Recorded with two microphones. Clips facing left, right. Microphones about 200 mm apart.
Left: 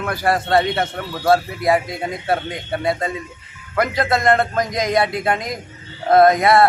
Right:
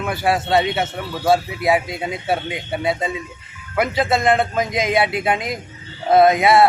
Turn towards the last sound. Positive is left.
turn(degrees=-5)  # may be behind; listen again after turning